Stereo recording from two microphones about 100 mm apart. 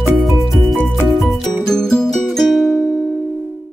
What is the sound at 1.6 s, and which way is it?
Music, 5° left (ahead or behind).